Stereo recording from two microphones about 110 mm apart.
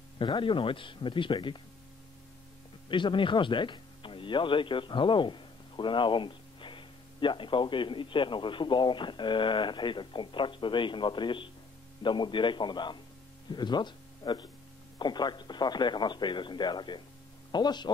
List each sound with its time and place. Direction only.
0.2 s speech: 50° left (ahead or behind)
2.9 s speech: 50° left (ahead or behind)